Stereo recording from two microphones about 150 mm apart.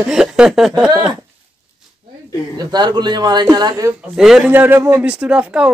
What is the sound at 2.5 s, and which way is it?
Speech, 30° right (ahead or behind).